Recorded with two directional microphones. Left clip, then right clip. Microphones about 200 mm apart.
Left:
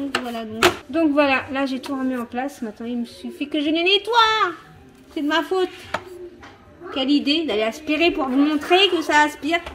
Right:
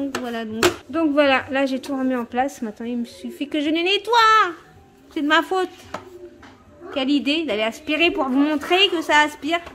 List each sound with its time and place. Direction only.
0.1 s a sound: 20° right (ahead or behind)
0.9 s a woman's voice: 10° right (ahead or behind)
6.9 s a woman's voice: 10° right (ahead or behind)